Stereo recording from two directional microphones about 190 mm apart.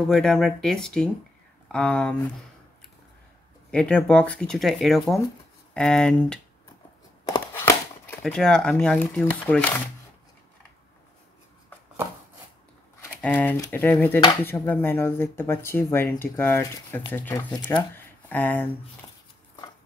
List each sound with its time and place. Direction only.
0.1 s speech: centre (ahead or behind)
3.7 s speech: 5° left (ahead or behind)
7.2 s a sound: 15° left (ahead or behind)
8.2 s speech: 5° left (ahead or behind)
13.0 s speech: 10° left (ahead or behind)
17.9 s a sound: 10° left (ahead or behind)
19.0 s dog: 20° left (ahead or behind)